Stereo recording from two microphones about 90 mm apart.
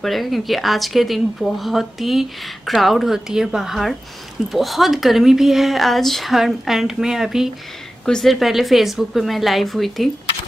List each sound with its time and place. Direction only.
0.0 s speech: centre (ahead or behind)
8.0 s speech: 5° left (ahead or behind)